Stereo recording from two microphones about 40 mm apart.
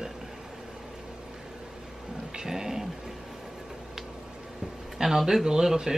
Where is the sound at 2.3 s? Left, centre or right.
Centre.